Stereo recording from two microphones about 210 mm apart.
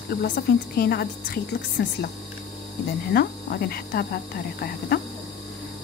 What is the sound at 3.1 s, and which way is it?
Speech, 45° left (ahead or behind).